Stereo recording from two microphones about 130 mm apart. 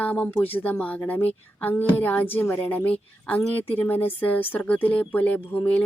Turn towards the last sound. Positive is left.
turn(degrees=10)  # may be behind; listen again after turning